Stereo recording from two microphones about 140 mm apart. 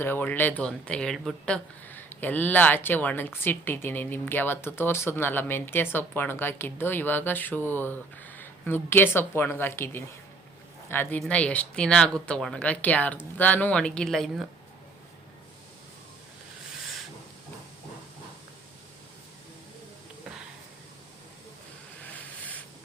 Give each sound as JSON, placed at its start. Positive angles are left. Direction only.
{"t": 0.0, "sound": "a woman's voice", "side_deg": 15}
{"t": 22.0, "sound": "vehicle", "side_deg": 10}